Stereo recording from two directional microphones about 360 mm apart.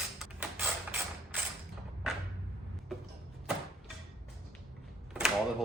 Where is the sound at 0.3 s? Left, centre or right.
Centre.